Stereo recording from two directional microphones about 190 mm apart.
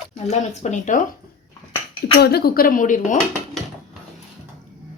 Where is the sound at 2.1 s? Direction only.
55° left (ahead or behind).